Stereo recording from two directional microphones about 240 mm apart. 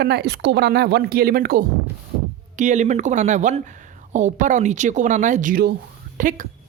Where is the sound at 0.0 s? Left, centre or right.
Right.